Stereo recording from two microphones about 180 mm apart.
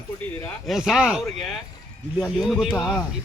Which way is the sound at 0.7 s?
Centre (ahead or behind).